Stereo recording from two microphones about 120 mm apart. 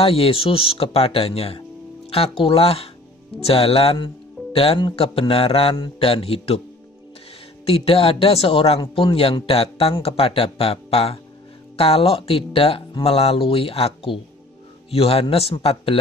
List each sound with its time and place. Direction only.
0.0 s speech: 50° left (ahead or behind)
7.6 s speech: 50° left (ahead or behind)